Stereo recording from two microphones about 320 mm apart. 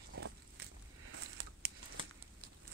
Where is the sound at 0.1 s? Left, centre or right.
Right.